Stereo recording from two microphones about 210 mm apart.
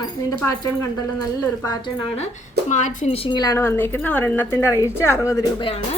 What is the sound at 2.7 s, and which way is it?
A woman's voice, 35° left (ahead or behind).